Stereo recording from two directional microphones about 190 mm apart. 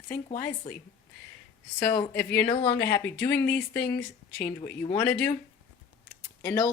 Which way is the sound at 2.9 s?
15° left (ahead or behind).